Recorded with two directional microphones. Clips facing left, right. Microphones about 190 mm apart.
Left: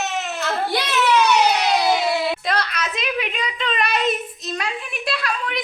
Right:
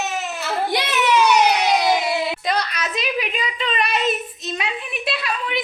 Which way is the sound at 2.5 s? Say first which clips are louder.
Right 1 dB; centre (ahead or behind).